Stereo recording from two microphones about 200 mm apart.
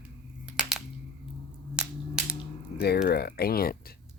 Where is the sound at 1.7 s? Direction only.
5° right (ahead or behind).